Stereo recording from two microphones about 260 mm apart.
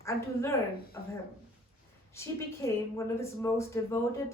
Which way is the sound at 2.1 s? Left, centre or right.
Centre.